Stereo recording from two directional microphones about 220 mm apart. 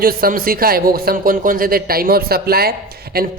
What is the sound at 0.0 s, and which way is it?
Speech, 40° right (ahead or behind).